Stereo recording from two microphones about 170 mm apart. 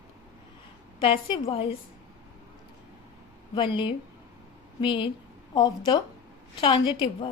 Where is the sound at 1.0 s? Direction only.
30° left (ahead or behind).